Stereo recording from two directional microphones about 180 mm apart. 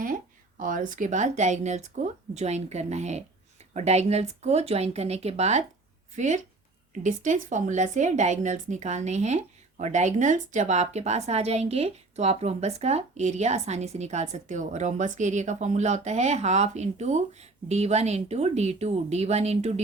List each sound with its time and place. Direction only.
0.0 s a woman's voice: 50° right (ahead or behind)